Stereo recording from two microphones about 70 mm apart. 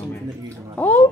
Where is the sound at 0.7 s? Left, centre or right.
Left.